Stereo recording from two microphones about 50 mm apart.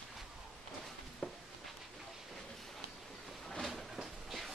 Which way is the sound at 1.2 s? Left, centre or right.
Left.